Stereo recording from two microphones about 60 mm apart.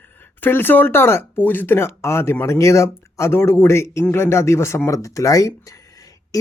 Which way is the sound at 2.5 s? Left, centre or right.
Left.